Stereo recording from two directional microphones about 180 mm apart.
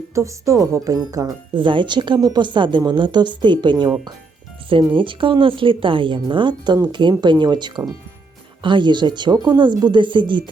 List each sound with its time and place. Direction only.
0.1 s a woman's voice: 15° right (ahead or behind)